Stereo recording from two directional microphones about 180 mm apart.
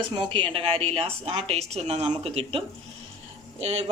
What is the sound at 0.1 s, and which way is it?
A woman's voice, 25° right (ahead or behind).